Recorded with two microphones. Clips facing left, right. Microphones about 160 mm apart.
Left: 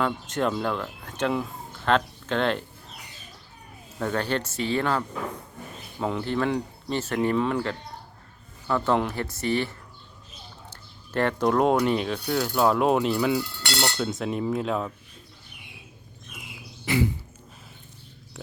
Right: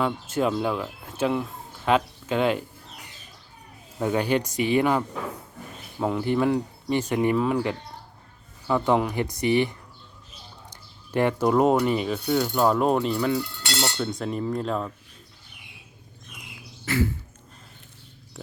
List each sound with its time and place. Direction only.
0.0 s speech: 5° right (ahead or behind)
4.0 s speech: 10° right (ahead or behind); by 14.9 s 5° left (ahead or behind)
16.8 s a sound: 15° left (ahead or behind)